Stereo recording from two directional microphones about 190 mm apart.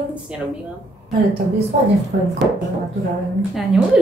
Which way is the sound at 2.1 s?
55° right (ahead or behind).